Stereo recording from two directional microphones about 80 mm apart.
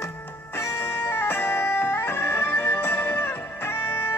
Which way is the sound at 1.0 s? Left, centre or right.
Left.